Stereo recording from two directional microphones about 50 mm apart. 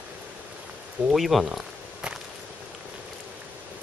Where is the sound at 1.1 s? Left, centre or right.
Centre.